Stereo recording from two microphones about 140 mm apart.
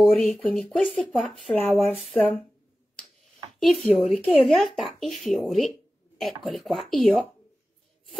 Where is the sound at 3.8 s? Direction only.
Centre (ahead or behind).